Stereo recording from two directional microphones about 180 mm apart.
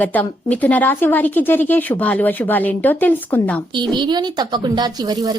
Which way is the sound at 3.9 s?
25° right (ahead or behind).